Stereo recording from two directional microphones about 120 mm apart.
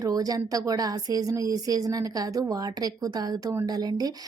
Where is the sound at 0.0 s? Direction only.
30° right (ahead or behind).